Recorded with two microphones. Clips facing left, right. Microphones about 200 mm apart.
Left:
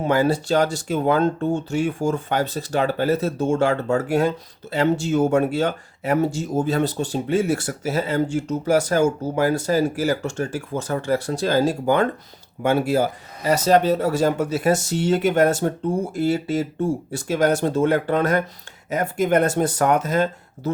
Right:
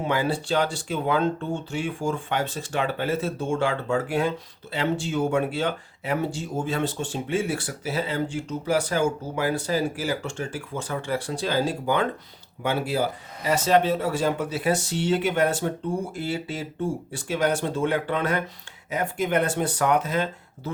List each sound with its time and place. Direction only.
0.0 s speech: 45° left (ahead or behind)